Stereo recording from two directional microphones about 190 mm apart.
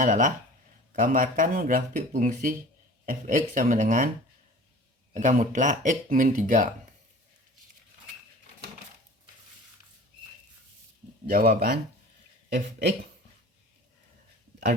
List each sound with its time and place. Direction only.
0.0 s speech: 40° right (ahead or behind)
5.1 s speech: 40° right (ahead or behind)
11.3 s speech: 50° right (ahead or behind)